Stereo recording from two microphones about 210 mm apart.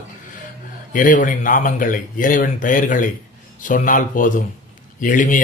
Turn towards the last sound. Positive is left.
turn(degrees=40)  # may be behind; listen again after turning